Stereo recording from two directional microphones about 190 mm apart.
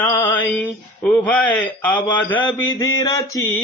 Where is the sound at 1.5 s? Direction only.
5° left (ahead or behind).